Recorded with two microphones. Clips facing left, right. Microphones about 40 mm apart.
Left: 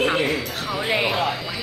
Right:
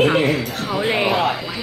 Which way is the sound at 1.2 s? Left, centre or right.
Centre.